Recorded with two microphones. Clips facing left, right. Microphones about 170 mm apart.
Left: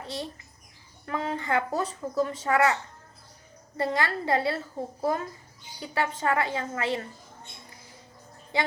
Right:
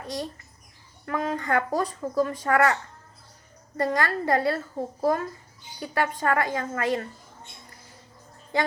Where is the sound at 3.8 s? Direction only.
25° left (ahead or behind).